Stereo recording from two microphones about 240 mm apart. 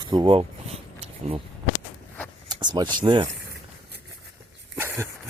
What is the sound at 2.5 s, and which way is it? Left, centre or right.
Speech, centre.